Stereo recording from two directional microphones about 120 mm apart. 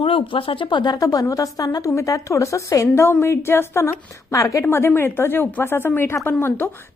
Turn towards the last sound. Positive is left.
turn(degrees=20)  # may be behind; listen again after turning